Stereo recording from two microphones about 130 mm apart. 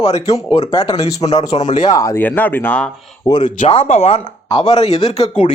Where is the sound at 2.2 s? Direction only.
15° left (ahead or behind).